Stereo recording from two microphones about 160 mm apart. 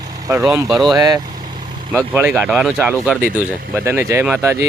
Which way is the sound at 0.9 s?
25° right (ahead or behind).